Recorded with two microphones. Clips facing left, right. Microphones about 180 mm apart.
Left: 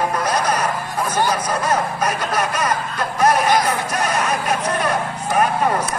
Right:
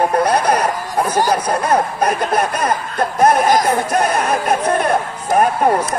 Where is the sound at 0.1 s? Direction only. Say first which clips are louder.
Right 5 dB; 60° right (ahead or behind).